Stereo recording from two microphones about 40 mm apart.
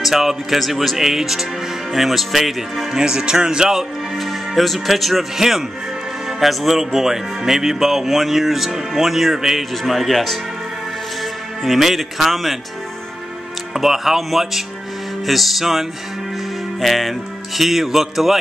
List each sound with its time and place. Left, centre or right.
0.0 s speech: centre
3.0 s speech: centre
4.2 s speech: centre
11.6 s speech: centre
13.7 s speech: centre